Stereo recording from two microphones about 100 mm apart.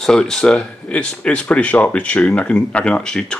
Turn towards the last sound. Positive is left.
turn(degrees=5)  # may be behind; listen again after turning